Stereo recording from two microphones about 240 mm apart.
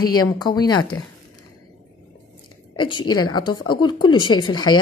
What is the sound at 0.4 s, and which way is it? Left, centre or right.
Speech, centre.